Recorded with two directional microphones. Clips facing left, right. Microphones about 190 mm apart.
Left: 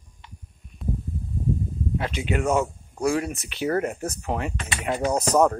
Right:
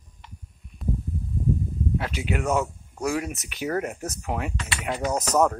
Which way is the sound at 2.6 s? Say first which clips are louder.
Left 3 dB; 10° left (ahead or behind).